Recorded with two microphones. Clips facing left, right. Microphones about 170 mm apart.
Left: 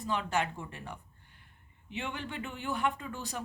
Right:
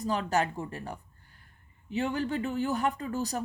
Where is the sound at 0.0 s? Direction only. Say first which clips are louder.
Right 4 dB; 40° right (ahead or behind).